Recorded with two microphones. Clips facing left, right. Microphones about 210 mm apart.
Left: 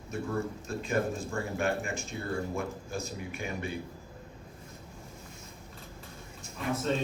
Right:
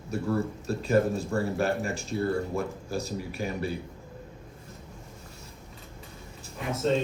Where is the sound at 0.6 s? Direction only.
40° right (ahead or behind).